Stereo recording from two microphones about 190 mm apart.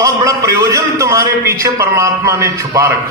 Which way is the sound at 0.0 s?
15° right (ahead or behind).